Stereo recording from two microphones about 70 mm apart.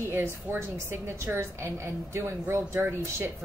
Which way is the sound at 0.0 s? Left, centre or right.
Right.